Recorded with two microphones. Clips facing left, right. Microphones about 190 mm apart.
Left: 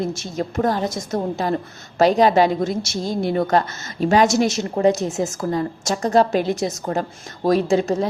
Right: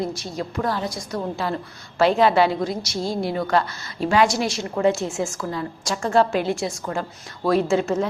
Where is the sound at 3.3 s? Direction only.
50° left (ahead or behind).